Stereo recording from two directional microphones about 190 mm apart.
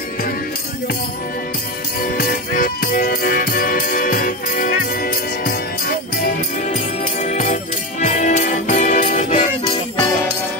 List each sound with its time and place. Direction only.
2.0 s music: 50° left (ahead or behind)
7.2 s music: 35° left (ahead or behind)